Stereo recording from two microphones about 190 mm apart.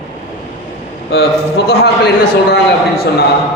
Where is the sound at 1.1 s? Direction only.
60° left (ahead or behind).